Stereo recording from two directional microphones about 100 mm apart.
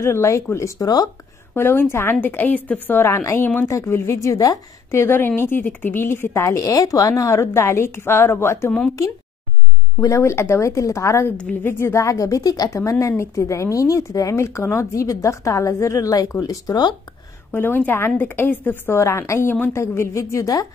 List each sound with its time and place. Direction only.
0.0 s a woman's voice: 30° left (ahead or behind)
1.5 s a woman's voice: 25° left (ahead or behind)
4.9 s a woman's voice: 20° left (ahead or behind)
10.0 s a woman's voice: 30° left (ahead or behind)
17.5 s a woman's voice: 20° left (ahead or behind)